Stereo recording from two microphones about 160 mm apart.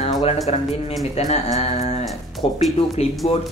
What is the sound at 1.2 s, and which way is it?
Speech, 45° left (ahead or behind).